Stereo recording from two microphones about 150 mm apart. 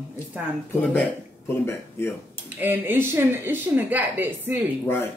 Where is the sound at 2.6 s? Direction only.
15° right (ahead or behind).